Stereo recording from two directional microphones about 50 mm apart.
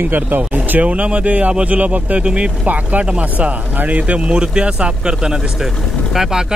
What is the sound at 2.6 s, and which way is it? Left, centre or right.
Speech, right.